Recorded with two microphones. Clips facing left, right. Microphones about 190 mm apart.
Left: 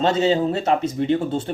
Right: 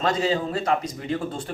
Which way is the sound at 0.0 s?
25° left (ahead or behind).